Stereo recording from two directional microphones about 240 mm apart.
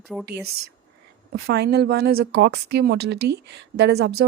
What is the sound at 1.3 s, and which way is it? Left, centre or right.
A woman's voice, right.